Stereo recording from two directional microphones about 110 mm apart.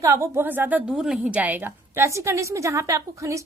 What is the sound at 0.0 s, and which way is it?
A woman's voice, 25° right (ahead or behind).